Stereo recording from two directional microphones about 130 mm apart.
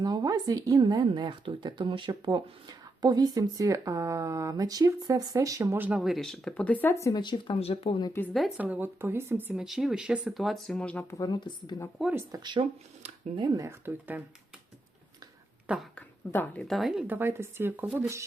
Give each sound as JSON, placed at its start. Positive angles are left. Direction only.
{"t": 0.0, "sound": "a woman's voice", "side_deg": -30}
{"t": 6.0, "sound": "speech", "side_deg": 0}
{"t": 7.0, "sound": "speech", "side_deg": 35}
{"t": 8.3, "sound": "speech", "side_deg": 0}
{"t": 8.5, "sound": "speech", "side_deg": -10}
{"t": 9.6, "sound": "speech", "side_deg": -5}
{"t": 11.1, "sound": "speech", "side_deg": 30}
{"t": 12.1, "sound": "speech", "side_deg": -30}
{"t": 13.7, "sound": "speech", "side_deg": -15}
{"t": 15.6, "sound": "speech", "side_deg": -5}
{"t": 16.0, "sound": "a sound", "side_deg": 15}
{"t": 16.6, "sound": "speech", "side_deg": 0}